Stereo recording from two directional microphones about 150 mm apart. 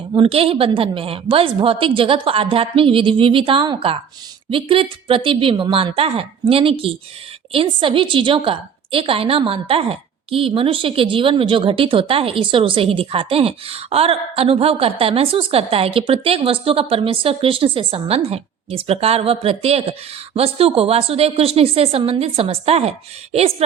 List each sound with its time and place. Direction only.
0.1 s a woman's voice: 35° right (ahead or behind)